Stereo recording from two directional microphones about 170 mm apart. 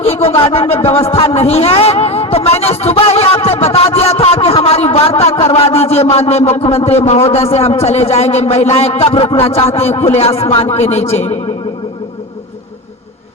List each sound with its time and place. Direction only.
0.0 s a man's voice: 35° left (ahead or behind)